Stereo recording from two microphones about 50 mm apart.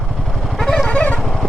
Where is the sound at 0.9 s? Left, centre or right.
Left.